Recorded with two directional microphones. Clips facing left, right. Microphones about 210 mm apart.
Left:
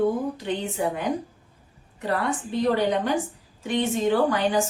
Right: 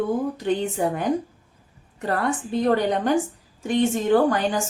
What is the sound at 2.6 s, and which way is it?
A woman's voice, 50° right (ahead or behind).